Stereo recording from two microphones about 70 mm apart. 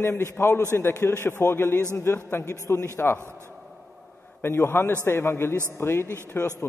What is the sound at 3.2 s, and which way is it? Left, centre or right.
Speech, right.